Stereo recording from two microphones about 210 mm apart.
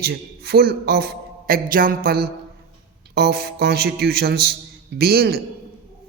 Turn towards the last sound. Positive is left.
turn(degrees=-50)  # may be behind; listen again after turning